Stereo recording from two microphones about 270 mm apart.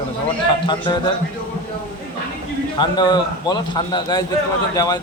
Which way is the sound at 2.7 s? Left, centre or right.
Centre.